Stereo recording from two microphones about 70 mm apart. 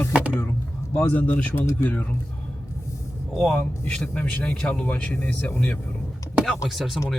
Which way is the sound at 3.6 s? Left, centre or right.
Left.